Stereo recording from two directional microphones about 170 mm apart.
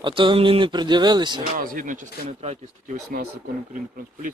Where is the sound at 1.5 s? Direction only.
55° right (ahead or behind).